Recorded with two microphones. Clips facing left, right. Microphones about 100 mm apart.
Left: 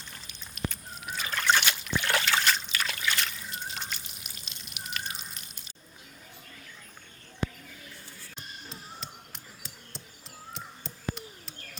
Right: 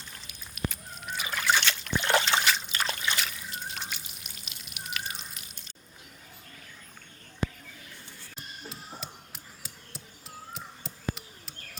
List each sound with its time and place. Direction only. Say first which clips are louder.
0.1 s a sound: even; centre (ahead or behind)
1.1 s trickle: left 1 dB; 10° right (ahead or behind)
1.6 s trickle: even; 10° left (ahead or behind)
1.9 s trickle: right 3 dB; 25° right (ahead or behind)
3.2 s drip: even; 5° right (ahead or behind)
8.4 s a sound: right 2 dB; 5° right (ahead or behind)